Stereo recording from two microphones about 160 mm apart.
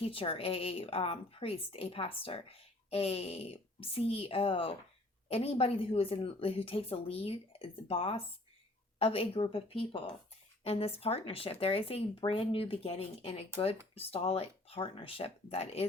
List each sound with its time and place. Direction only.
0.0 s speech: 35° left (ahead or behind)